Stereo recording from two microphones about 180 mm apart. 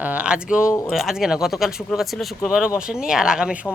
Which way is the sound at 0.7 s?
15° left (ahead or behind).